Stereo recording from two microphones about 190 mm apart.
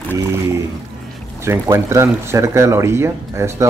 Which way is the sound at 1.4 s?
15° right (ahead or behind).